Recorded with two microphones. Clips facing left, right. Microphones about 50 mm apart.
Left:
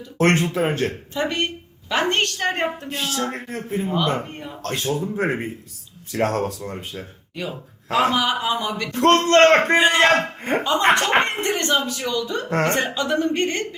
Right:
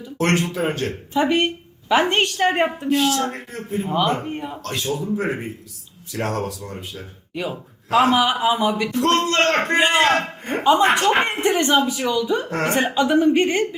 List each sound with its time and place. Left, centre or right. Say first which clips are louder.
0.2 s speech: left 2 dB; left
1.1 s speech: right 5 dB; centre
2.9 s speech: right 9 dB; right
3.3 s speech: left 1 dB; left
3.8 s speech: right 3 dB; centre
4.6 s speech: left 3 dB; left
7.3 s speech: right 3 dB; centre
7.9 s speech: right 3 dB; right
8.9 s speech: left 3 dB; left
10.6 s speech: right 3 dB; centre